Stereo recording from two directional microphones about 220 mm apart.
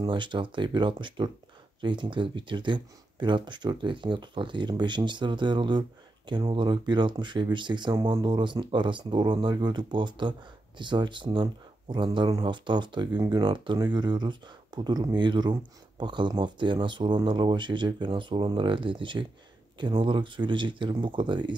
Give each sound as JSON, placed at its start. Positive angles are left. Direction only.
{"t": 0.0, "sound": "speech", "side_deg": -20}